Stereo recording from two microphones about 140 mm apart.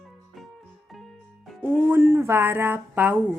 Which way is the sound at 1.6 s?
15° right (ahead or behind).